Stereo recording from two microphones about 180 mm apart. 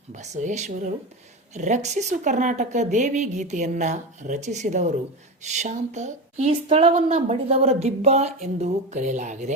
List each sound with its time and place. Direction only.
0.1 s a woman's voice: 45° right (ahead or behind)